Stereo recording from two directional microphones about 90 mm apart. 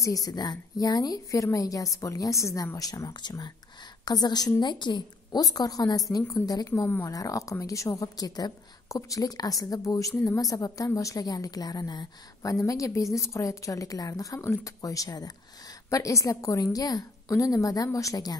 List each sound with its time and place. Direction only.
0.0 s a woman's voice: 40° left (ahead or behind)
3.1 s a woman's voice: 55° left (ahead or behind)